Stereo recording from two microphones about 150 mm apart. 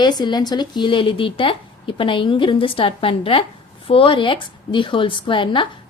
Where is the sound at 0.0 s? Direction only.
30° left (ahead or behind).